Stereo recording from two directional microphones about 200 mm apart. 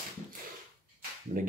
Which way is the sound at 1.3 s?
45° right (ahead or behind).